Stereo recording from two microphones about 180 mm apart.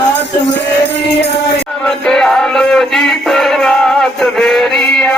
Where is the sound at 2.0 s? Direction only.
5° left (ahead or behind).